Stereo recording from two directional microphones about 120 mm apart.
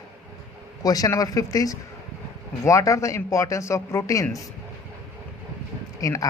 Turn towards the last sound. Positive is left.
turn(degrees=30)  # may be behind; listen again after turning